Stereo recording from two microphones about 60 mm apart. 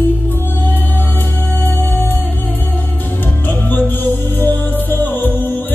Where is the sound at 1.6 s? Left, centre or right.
Left.